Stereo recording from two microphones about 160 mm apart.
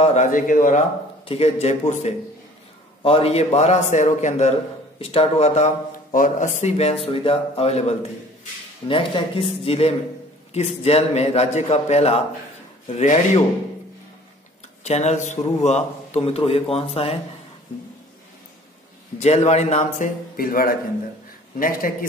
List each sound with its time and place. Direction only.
0.0 s a man's voice: 45° left (ahead or behind)
1.2 s a man's voice: 40° left (ahead or behind)
6.1 s a man's voice: 55° left (ahead or behind)
14.8 s a man's voice: 45° left (ahead or behind)
19.1 s a man's voice: 45° left (ahead or behind)
20.3 s a man's voice: 65° left (ahead or behind)